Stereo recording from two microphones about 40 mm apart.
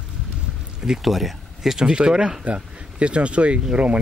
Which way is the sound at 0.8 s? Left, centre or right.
Centre.